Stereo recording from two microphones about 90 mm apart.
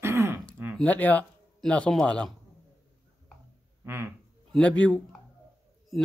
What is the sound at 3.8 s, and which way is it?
Speech, 25° right (ahead or behind).